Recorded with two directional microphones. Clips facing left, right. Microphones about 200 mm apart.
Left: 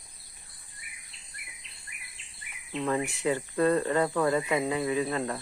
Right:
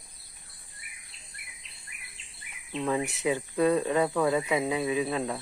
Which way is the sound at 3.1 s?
20° right (ahead or behind).